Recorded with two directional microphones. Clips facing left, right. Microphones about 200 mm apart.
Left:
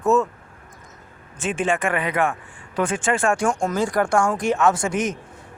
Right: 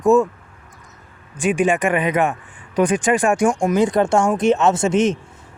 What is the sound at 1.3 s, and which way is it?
Speech, 15° right (ahead or behind).